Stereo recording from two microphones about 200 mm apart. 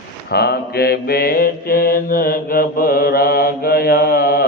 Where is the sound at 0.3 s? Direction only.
55° left (ahead or behind).